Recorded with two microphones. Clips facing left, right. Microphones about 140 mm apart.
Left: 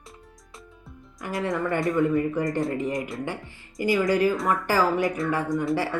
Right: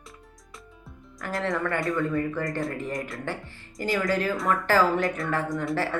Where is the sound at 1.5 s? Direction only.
15° left (ahead or behind).